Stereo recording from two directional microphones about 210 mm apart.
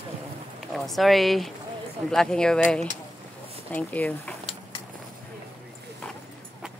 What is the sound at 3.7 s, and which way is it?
Speech, 5° left (ahead or behind).